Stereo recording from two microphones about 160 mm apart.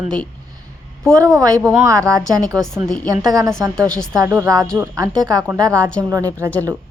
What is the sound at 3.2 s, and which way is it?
Speech, 25° right (ahead or behind).